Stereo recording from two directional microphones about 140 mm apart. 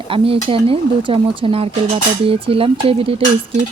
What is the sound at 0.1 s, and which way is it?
Speech, 40° right (ahead or behind).